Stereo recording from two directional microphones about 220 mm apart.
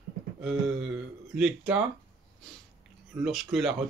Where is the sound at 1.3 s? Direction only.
5° right (ahead or behind).